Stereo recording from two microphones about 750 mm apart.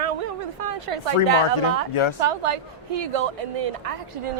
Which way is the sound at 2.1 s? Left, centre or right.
Right.